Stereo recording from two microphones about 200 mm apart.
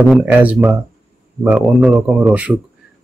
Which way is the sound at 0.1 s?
5° right (ahead or behind).